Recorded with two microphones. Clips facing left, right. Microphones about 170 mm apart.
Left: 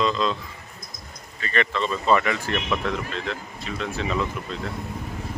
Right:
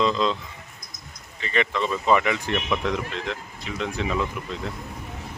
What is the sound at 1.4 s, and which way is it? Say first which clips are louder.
Speech: even; 15° right (ahead or behind).